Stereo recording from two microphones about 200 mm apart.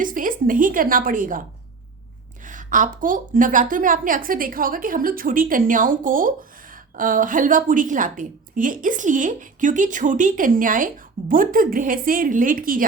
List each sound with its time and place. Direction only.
0.0 s a woman's voice: 40° right (ahead or behind)
2.5 s a woman's voice: 40° right (ahead or behind)